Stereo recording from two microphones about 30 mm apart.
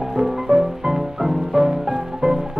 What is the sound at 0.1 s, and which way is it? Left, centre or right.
Music, centre.